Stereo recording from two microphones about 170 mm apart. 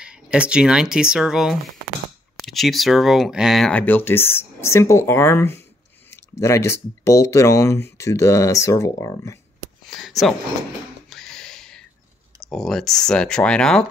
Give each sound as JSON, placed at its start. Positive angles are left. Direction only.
{"t": 0.0, "sound": "speech", "side_deg": -5}
{"t": 9.8, "sound": "a sound", "side_deg": 0}
{"t": 12.4, "sound": "speech", "side_deg": 0}